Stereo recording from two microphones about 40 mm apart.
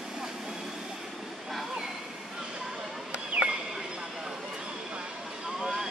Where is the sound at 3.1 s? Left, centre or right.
Right.